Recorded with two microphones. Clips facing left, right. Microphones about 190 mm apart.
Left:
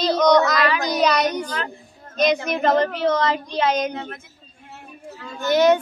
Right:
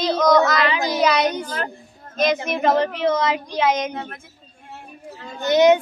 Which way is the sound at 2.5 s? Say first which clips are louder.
Even; 5° right (ahead or behind).